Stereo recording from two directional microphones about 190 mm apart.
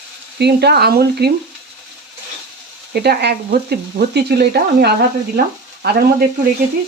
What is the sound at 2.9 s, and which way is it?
Stir, 55° right (ahead or behind).